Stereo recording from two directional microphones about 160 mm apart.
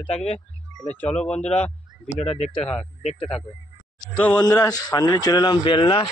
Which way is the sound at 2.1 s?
40° left (ahead or behind).